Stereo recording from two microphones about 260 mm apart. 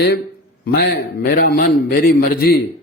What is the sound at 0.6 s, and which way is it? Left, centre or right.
A man's voice, left.